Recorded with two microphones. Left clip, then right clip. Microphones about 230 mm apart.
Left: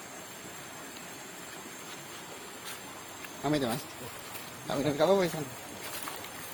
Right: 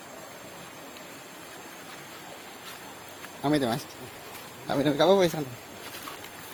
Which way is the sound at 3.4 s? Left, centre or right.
Right.